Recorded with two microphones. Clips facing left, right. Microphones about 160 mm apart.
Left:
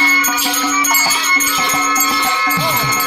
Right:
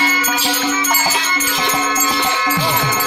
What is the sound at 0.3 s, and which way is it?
Music, 60° right (ahead or behind).